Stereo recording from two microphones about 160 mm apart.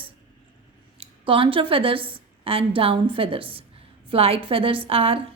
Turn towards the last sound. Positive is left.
turn(degrees=-35)  # may be behind; listen again after turning